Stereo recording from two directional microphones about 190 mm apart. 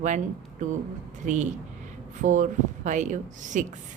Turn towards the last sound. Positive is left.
turn(degrees=-40)  # may be behind; listen again after turning